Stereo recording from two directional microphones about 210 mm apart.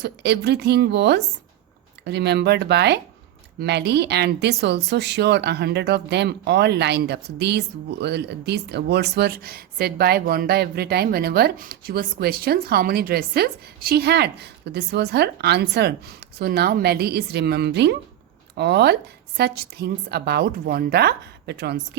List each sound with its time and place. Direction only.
0.0 s speech: 50° right (ahead or behind)